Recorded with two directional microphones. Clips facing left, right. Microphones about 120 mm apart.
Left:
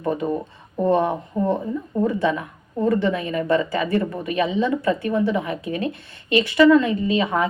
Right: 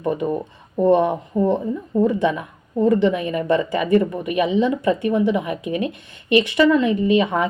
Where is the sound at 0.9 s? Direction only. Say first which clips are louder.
Right 3 dB; 15° right (ahead or behind).